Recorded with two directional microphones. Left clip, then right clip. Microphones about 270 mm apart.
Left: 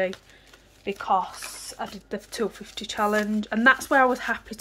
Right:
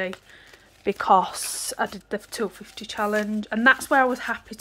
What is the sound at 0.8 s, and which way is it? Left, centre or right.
Speech, right.